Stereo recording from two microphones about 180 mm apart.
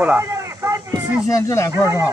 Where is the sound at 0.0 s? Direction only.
15° right (ahead or behind).